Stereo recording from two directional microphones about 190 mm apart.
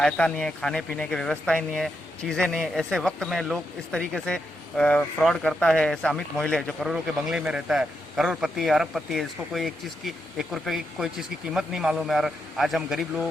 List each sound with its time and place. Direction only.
0.0 s speech: 5° left (ahead or behind)